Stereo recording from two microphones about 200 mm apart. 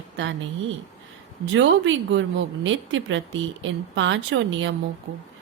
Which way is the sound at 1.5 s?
70° right (ahead or behind).